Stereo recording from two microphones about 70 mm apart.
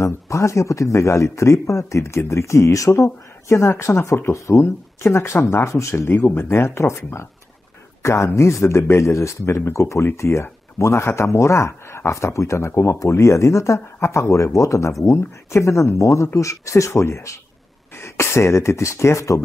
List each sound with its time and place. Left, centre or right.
0.0 s speech: left